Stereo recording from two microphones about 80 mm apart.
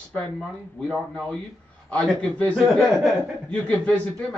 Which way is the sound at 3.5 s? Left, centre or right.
Centre.